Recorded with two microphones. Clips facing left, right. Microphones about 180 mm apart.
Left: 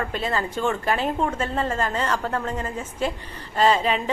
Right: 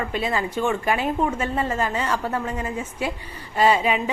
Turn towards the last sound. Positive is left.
turn(degrees=-10)  # may be behind; listen again after turning